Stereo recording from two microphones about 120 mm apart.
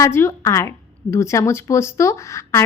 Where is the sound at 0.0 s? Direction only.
20° left (ahead or behind).